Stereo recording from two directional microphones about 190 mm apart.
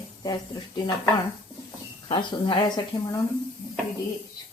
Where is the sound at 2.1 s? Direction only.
25° left (ahead or behind).